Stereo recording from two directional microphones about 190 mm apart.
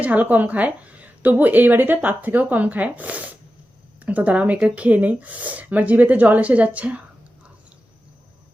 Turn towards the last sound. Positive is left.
turn(degrees=-5)  # may be behind; listen again after turning